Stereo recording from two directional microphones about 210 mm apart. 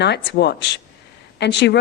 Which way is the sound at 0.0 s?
55° left (ahead or behind).